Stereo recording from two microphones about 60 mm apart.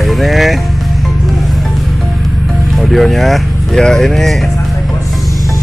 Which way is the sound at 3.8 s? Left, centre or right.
Centre.